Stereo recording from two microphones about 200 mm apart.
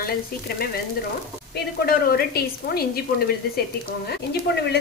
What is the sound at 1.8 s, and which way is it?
Speech, 50° left (ahead or behind).